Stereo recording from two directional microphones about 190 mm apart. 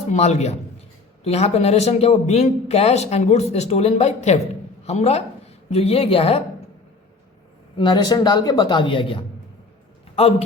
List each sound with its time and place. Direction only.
0.1 s a woman's voice: 35° left (ahead or behind)
7.8 s a man's voice: 20° left (ahead or behind)